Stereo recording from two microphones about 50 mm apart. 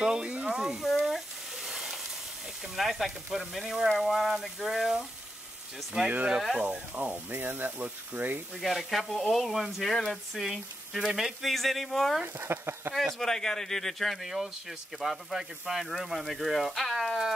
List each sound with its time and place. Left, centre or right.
0.0 s speech: centre
0.8 s frying: centre
2.7 s speech: centre
6.0 s speech: right
8.5 s speech: centre
11.4 s speech: centre
12.4 s speech: right
12.9 s speech: centre